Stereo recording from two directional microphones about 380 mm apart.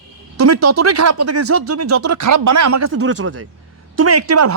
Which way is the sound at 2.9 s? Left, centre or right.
Right.